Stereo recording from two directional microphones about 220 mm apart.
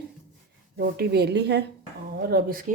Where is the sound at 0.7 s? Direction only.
45° right (ahead or behind).